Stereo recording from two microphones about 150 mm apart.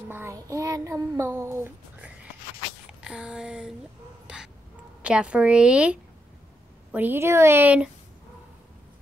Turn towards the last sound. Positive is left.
turn(degrees=-10)  # may be behind; listen again after turning